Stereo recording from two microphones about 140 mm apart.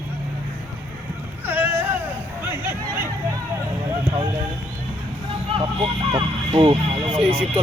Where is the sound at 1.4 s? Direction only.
15° right (ahead or behind).